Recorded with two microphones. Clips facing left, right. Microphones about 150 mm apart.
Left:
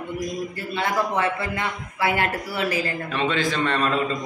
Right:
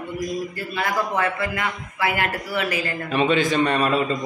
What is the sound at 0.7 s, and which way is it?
Speech, 25° left (ahead or behind).